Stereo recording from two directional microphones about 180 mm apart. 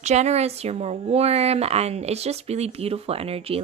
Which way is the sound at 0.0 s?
40° right (ahead or behind).